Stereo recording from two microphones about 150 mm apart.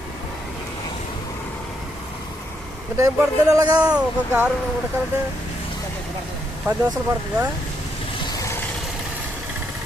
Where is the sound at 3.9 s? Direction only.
10° right (ahead or behind).